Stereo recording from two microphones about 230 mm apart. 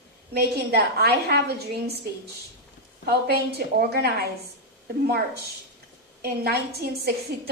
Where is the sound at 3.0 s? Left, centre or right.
Right.